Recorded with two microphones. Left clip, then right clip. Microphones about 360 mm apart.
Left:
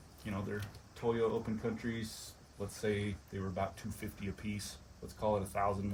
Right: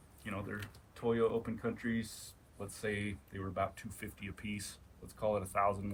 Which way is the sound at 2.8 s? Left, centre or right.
Centre.